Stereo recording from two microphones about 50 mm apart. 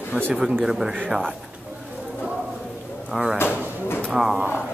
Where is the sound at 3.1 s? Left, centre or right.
Centre.